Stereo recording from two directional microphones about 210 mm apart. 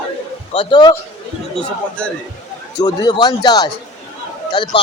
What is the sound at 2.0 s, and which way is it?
Speech, 5° left (ahead or behind).